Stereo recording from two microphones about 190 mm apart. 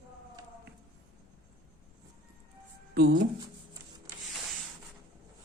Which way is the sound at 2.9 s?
55° right (ahead or behind).